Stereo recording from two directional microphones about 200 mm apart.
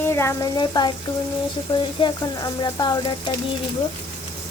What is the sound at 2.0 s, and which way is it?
Speech, 20° left (ahead or behind).